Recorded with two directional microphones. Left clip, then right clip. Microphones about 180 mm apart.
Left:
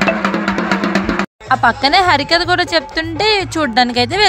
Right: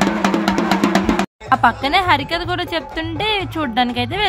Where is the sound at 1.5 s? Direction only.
45° left (ahead or behind).